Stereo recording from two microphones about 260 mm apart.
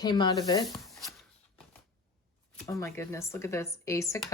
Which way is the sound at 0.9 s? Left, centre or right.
Centre.